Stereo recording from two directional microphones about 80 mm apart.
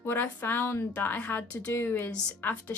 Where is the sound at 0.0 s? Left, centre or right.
Left.